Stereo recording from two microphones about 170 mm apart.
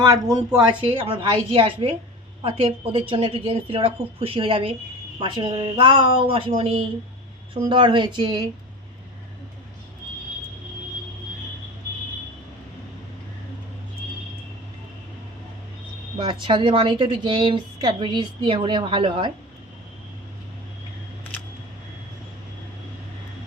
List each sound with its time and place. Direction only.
0.0 s a woman's voice: 25° right (ahead or behind)
16.1 s a woman's voice: 25° right (ahead or behind)